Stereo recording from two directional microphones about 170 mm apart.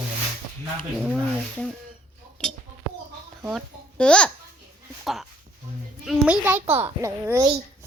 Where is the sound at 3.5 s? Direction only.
5° left (ahead or behind).